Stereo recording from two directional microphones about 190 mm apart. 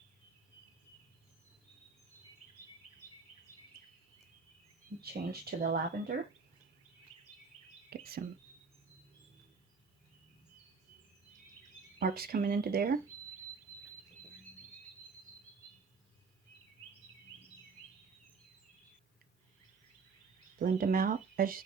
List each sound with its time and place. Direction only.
4.9 s speech: 55° right (ahead or behind)
7.9 s a sound: 55° right (ahead or behind)
11.9 s speech: 55° right (ahead or behind)
20.6 s speech: 50° right (ahead or behind)